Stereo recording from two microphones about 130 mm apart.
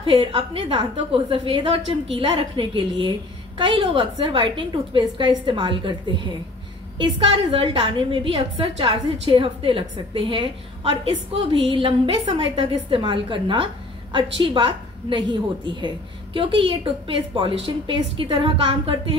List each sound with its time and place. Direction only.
0.0 s a woman's voice: 40° right (ahead or behind)